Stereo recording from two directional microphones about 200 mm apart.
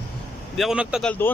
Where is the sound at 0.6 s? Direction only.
5° right (ahead or behind).